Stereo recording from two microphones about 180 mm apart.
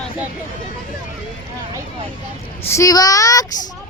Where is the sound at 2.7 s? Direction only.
15° left (ahead or behind).